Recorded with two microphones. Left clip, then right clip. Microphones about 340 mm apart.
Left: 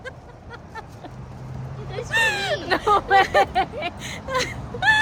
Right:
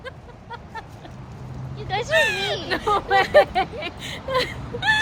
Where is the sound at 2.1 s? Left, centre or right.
Centre.